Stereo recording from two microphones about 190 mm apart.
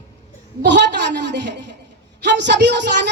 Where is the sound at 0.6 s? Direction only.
65° right (ahead or behind).